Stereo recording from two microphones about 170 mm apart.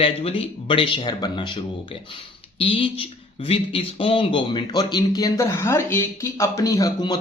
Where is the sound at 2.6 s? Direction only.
30° left (ahead or behind).